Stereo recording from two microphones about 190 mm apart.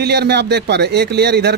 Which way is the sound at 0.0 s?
60° right (ahead or behind).